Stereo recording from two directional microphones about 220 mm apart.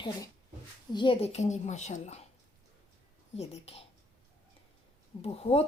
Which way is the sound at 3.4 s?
25° left (ahead or behind).